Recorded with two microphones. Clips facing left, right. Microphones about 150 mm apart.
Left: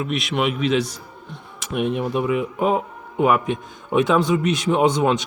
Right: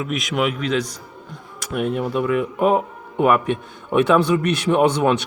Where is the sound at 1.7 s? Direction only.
15° left (ahead or behind); by 2.7 s centre (ahead or behind).